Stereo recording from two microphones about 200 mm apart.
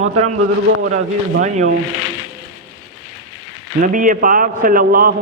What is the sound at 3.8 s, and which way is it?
A man's voice, 40° right (ahead or behind).